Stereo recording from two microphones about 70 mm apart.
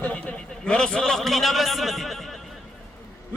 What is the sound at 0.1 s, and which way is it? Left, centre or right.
A man's voice, centre.